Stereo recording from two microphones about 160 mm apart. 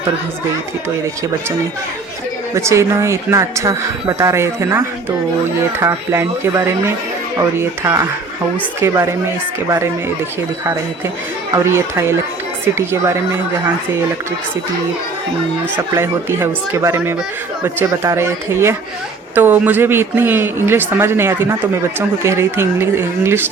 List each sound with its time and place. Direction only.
2.6 s a woman's voice: 20° right (ahead or behind)
9.6 s a woman's voice: 15° right (ahead or behind)
11.5 s a woman's voice: 15° right (ahead or behind)
16.0 s a woman's voice: 15° right (ahead or behind)